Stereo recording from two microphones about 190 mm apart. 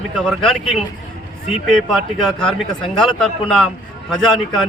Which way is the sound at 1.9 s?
Centre (ahead or behind).